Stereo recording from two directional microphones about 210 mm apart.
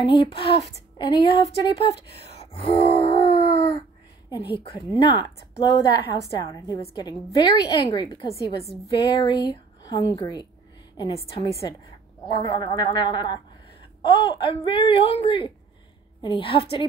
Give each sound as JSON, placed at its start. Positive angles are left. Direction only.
{"t": 0.0, "sound": "a woman's voice", "side_deg": 25}
{"t": 2.6, "sound": "a sound", "side_deg": 25}
{"t": 4.6, "sound": "a woman's voice", "side_deg": 25}